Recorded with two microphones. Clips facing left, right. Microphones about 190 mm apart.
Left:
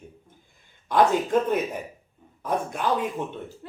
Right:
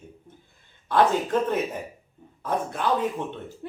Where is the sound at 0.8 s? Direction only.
15° left (ahead or behind).